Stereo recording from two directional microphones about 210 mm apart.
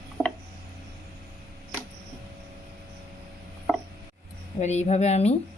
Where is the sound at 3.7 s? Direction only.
Centre (ahead or behind).